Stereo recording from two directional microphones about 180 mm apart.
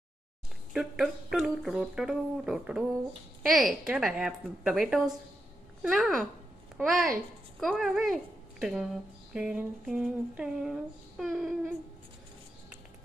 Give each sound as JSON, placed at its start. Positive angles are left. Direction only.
{"t": 0.7, "sound": "speech", "side_deg": 0}